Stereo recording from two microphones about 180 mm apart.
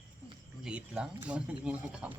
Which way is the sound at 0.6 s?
5° right (ahead or behind).